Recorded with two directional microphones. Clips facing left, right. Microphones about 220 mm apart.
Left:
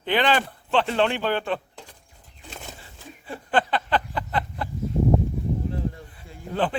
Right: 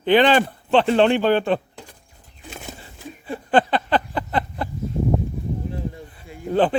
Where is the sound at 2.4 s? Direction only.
10° right (ahead or behind).